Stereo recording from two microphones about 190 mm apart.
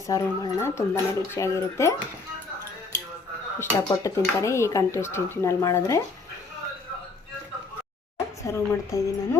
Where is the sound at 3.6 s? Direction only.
15° left (ahead or behind).